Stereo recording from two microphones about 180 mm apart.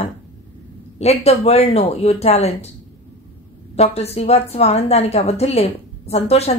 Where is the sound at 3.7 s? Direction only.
35° left (ahead or behind).